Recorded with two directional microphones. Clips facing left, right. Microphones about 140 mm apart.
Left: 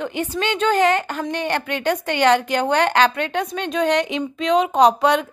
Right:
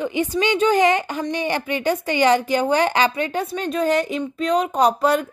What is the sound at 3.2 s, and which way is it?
Speech, 70° left (ahead or behind).